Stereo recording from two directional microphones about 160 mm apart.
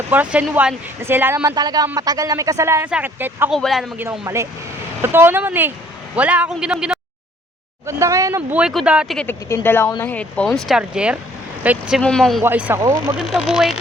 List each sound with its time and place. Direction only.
0.1 s speech: 10° right (ahead or behind)
3.5 s speech: centre (ahead or behind)
3.9 s speech: 10° right (ahead or behind)
7.9 s speech: 20° right (ahead or behind)
9.1 s speech: 10° left (ahead or behind); by 11.9 s 10° right (ahead or behind)
11.9 s speech: 5° left (ahead or behind)
12.4 s speech: 10° right (ahead or behind)
13.1 s speech: centre (ahead or behind)